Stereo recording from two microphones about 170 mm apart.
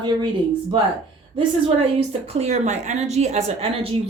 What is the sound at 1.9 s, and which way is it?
A woman's voice, 40° right (ahead or behind).